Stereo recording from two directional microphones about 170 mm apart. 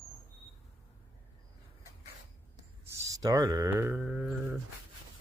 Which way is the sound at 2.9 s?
20° right (ahead or behind).